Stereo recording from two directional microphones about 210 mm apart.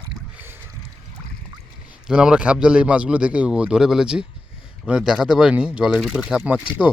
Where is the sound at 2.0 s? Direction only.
5° right (ahead or behind).